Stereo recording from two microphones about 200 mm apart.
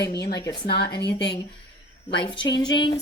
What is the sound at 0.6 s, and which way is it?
Speech, 55° left (ahead or behind).